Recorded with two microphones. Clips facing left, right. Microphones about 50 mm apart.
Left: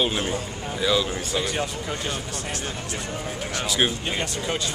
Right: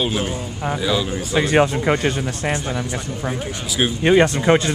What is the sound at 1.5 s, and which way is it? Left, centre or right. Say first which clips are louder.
Speech: right 12 dB; right.